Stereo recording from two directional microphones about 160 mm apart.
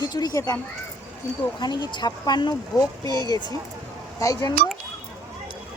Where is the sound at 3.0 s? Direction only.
25° right (ahead or behind).